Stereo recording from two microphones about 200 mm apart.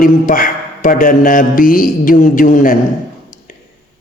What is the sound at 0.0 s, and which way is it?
Mantra, 40° left (ahead or behind).